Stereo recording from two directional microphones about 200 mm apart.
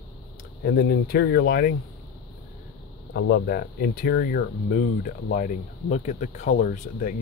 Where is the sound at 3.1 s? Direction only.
60° left (ahead or behind).